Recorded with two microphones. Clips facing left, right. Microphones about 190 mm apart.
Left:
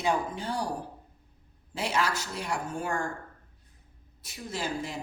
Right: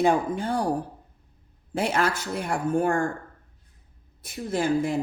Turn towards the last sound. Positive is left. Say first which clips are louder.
# right 10 dB
turn(degrees=-55)  # may be behind; listen again after turning